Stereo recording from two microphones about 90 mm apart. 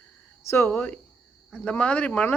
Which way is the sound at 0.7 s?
15° left (ahead or behind).